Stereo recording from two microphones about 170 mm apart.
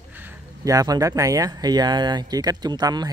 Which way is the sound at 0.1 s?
10° right (ahead or behind).